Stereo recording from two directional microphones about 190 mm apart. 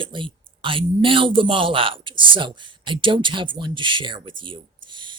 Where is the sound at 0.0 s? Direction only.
25° right (ahead or behind).